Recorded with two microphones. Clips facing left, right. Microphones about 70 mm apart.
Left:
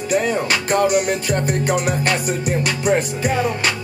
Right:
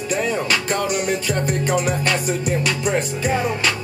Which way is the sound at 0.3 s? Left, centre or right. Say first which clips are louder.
Left 2 dB; centre.